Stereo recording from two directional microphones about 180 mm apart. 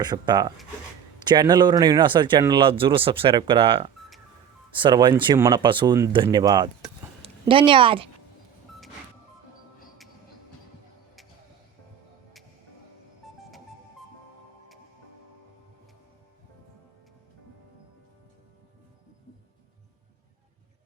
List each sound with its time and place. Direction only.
0.0 s speech: 25° right (ahead or behind)